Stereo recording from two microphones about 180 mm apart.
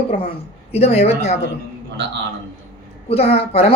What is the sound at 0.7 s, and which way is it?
Speech, 35° left (ahead or behind).